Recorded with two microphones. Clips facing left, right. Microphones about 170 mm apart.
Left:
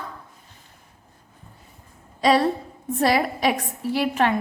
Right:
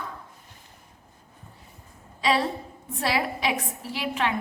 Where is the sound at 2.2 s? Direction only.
45° left (ahead or behind).